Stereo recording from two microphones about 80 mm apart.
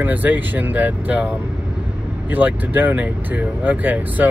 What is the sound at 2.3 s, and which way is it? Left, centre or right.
Speech, right.